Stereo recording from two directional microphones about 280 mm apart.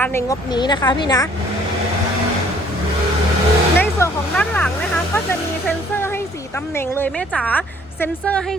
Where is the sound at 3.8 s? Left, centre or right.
Centre.